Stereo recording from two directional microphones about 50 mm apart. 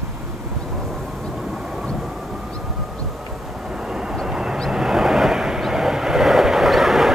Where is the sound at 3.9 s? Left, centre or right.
Centre.